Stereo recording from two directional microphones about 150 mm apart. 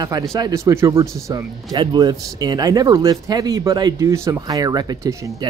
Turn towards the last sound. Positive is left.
turn(degrees=-25)  # may be behind; listen again after turning